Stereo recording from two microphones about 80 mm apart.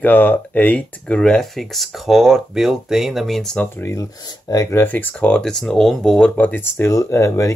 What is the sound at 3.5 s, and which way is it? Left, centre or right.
Speech, centre.